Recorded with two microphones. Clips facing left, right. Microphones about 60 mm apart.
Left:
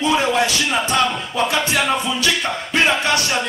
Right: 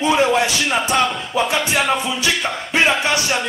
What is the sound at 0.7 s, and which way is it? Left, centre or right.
Music, centre.